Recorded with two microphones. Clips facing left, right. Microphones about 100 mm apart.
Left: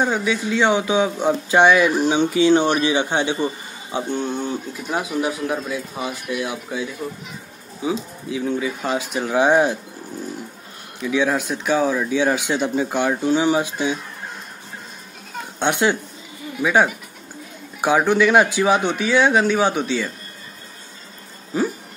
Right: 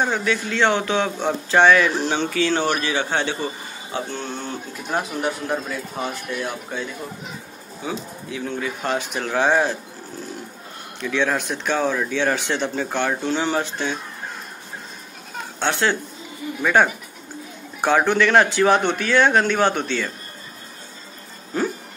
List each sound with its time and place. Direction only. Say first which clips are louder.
0.0 s speech: left 1 dB; 10° left (ahead or behind)
11.0 s speech: left 2 dB; 10° left (ahead or behind)
15.6 s a man's voice: left 2 dB; 15° left (ahead or behind)
21.5 s a sound: left 2 dB; 5° left (ahead or behind)